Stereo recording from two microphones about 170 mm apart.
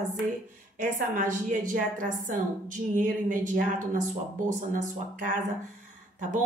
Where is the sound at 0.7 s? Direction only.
50° right (ahead or behind).